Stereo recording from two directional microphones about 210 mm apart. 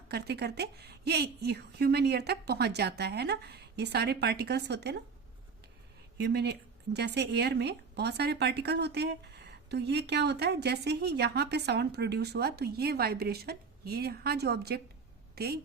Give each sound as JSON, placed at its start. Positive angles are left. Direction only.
{"t": 0.1, "sound": "speech", "side_deg": -50}
{"t": 6.1, "sound": "speech", "side_deg": -55}